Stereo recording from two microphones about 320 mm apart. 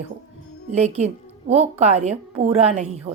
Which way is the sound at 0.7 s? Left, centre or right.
Centre.